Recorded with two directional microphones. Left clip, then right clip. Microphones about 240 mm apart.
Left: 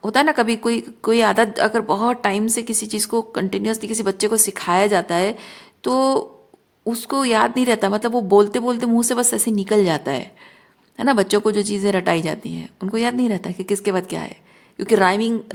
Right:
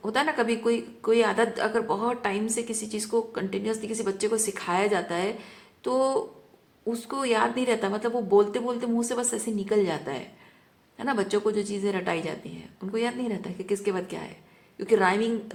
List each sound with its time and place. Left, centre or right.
0.0 s speech: left